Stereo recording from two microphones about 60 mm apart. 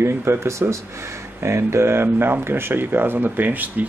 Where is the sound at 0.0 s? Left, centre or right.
Right.